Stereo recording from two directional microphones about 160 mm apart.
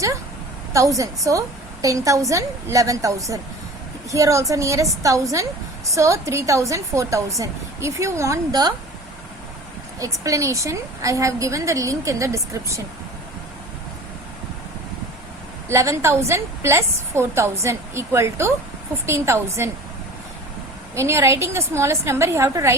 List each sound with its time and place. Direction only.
0.7 s a woman's voice: 20° right (ahead or behind)
10.0 s a woman's voice: 20° right (ahead or behind)
15.7 s a woman's voice: 15° right (ahead or behind)
20.9 s a woman's voice: 15° right (ahead or behind)